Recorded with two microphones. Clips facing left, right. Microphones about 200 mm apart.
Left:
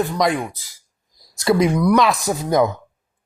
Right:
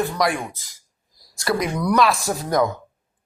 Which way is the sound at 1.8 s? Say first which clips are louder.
Left 3 dB; 15° left (ahead or behind).